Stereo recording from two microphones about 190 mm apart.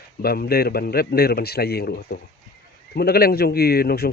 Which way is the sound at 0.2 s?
55° left (ahead or behind).